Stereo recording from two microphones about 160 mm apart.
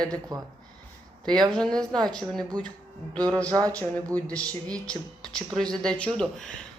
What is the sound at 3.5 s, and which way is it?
Speech, 20° right (ahead or behind).